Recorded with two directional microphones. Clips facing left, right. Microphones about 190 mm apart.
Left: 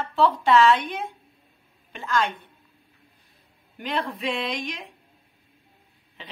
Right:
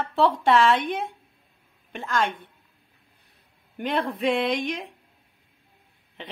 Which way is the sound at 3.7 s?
55° right (ahead or behind).